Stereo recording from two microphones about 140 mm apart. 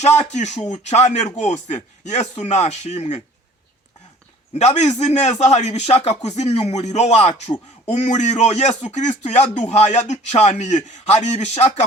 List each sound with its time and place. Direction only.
0.0 s speech: 55° left (ahead or behind)
4.5 s speech: 55° left (ahead or behind)